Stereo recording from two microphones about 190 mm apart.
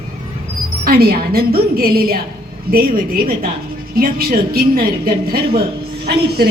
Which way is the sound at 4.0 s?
50° right (ahead or behind).